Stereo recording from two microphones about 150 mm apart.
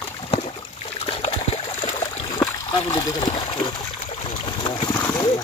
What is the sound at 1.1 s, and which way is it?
Water, 40° left (ahead or behind).